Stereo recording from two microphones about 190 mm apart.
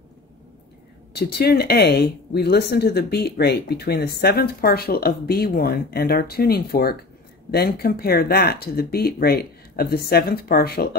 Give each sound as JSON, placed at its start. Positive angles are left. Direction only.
{"t": 1.1, "sound": "speech", "side_deg": 55}